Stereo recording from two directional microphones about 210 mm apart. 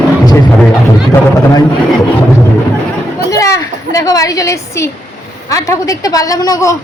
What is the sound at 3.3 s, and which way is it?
A woman's voice, 15° left (ahead or behind).